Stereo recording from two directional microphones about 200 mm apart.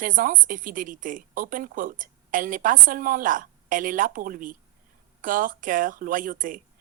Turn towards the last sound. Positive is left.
turn(degrees=-45)  # may be behind; listen again after turning